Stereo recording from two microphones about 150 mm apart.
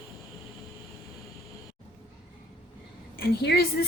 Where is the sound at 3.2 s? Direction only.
90° left.